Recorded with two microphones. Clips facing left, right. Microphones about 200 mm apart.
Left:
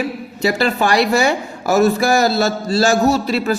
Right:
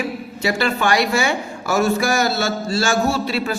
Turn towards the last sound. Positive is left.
turn(degrees=40)  # may be behind; listen again after turning